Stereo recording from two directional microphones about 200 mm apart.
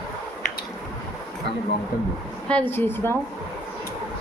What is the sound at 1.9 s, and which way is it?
Speech, 50° left (ahead or behind).